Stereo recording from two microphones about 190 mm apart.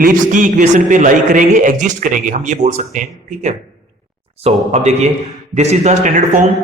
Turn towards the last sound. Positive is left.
turn(degrees=-45)  # may be behind; listen again after turning